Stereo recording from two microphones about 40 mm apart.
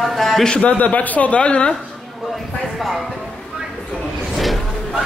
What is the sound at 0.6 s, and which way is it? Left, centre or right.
A man's voice, left.